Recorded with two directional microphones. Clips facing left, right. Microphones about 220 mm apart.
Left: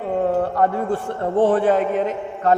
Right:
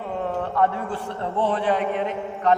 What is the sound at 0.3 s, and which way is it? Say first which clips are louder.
A man's voice: left 4 dB; 40° left (ahead or behind).